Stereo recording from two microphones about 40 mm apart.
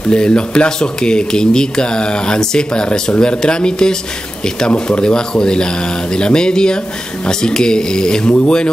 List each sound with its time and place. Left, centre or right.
0.1 s speech: left